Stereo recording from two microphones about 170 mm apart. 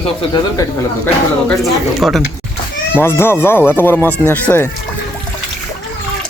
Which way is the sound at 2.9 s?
15° left (ahead or behind).